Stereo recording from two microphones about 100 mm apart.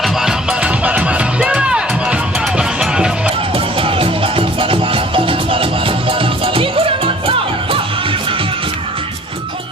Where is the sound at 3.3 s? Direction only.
65° right (ahead or behind).